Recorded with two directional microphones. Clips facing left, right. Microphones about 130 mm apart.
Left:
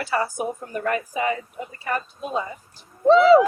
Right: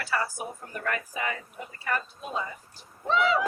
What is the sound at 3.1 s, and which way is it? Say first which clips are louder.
Owl: left 12 dB; 35° left (ahead or behind).